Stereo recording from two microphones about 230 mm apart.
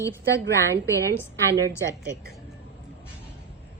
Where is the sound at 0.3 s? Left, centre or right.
Right.